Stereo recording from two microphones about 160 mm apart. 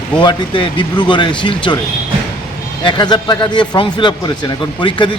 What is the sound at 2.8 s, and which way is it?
A man's voice, 30° left (ahead or behind).